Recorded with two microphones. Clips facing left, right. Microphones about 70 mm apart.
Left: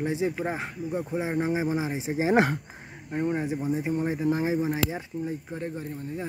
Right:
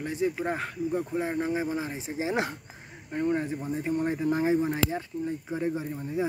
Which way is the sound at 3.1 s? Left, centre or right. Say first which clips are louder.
Even; centre.